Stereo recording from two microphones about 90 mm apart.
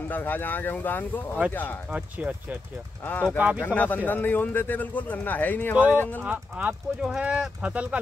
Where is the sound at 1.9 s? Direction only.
15° right (ahead or behind).